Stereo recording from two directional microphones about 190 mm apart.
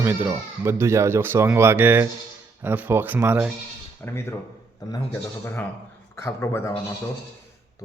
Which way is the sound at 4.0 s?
15° left (ahead or behind).